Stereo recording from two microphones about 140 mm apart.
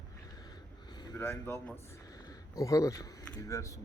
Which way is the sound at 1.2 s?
15° left (ahead or behind).